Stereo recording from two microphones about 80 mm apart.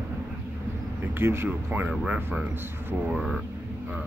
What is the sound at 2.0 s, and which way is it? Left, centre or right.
Speech, centre.